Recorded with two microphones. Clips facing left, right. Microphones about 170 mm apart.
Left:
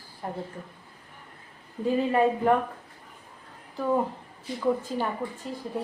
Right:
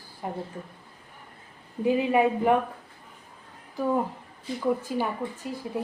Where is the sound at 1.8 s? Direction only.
10° right (ahead or behind).